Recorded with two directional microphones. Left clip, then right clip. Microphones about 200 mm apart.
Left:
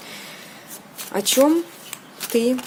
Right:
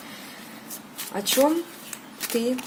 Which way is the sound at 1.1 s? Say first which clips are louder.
Left 4 dB; 35° left (ahead or behind).